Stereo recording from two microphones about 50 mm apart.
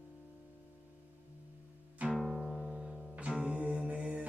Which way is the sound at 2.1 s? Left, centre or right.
Centre.